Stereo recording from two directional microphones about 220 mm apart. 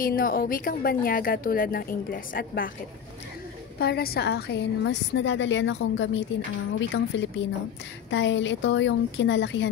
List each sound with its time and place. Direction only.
0.0 s speech: 40° left (ahead or behind)
3.8 s a woman's voice: 45° left (ahead or behind)